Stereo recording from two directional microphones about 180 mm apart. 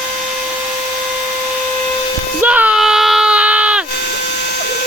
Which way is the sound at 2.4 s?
10° right (ahead or behind).